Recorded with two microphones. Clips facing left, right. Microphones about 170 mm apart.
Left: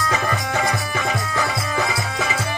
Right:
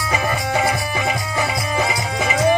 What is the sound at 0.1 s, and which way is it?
Music, 15° right (ahead or behind).